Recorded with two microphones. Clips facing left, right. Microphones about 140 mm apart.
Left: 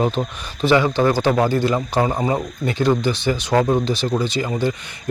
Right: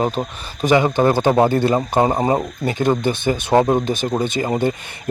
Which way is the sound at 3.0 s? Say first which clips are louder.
Right 1 dB; 55° right (ahead or behind).